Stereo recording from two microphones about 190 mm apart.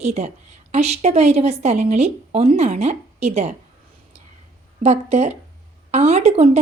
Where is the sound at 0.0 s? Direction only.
35° right (ahead or behind).